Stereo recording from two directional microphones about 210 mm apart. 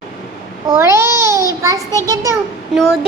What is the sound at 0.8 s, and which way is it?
Babbling, 10° right (ahead or behind).